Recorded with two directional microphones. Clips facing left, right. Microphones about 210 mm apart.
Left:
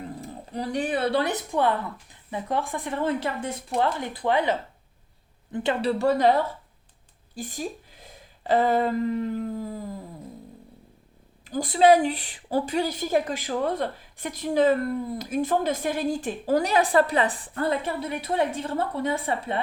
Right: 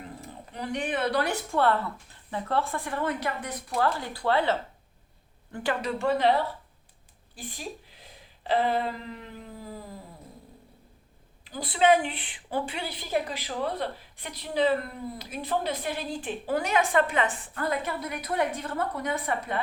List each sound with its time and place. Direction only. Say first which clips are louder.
0.5 s a woman's voice: left 4 dB; 35° left (ahead or behind); by 5.7 s 20° left (ahead or behind)
5.8 s a woman's voice: left 4 dB; 40° left (ahead or behind)
7.3 s speech: left 6 dB; 45° left (ahead or behind)
11.4 s a woman's voice: left 5 dB; 45° left (ahead or behind); by 19.6 s 25° left (ahead or behind)